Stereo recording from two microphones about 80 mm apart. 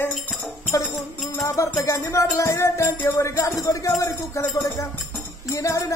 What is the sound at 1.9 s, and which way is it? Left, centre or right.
Music, left.